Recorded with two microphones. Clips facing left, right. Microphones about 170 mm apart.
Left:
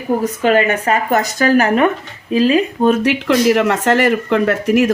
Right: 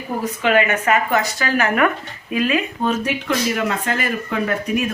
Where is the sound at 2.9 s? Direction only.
80° left.